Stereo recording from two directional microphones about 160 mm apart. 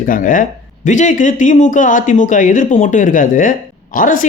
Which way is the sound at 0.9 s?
50° left (ahead or behind).